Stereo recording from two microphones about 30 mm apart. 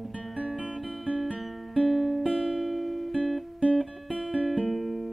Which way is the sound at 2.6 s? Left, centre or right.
Centre.